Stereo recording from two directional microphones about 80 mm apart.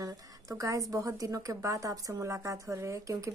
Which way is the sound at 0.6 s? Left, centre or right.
Right.